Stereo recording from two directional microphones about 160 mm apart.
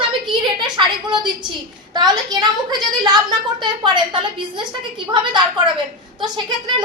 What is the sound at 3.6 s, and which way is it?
A woman's voice, 30° right (ahead or behind).